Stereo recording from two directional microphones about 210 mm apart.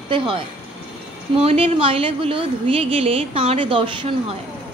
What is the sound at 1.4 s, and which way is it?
Speech, 30° right (ahead or behind).